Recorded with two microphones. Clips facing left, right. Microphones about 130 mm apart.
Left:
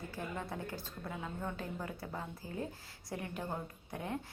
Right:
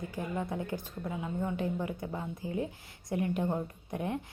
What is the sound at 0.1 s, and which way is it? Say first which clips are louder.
Speech: right 6 dB; 15° right (ahead or behind).